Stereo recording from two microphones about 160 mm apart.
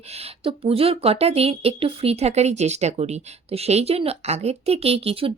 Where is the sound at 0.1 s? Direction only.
35° right (ahead or behind).